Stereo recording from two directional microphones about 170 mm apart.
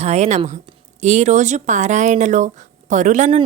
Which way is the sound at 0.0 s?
40° right (ahead or behind).